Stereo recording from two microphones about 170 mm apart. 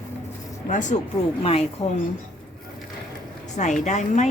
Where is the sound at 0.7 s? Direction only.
45° left (ahead or behind).